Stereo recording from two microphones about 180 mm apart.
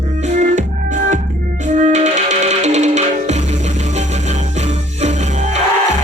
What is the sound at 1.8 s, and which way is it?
Music, 40° right (ahead or behind).